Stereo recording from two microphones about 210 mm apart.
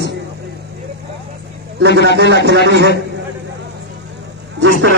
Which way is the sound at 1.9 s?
55° right (ahead or behind).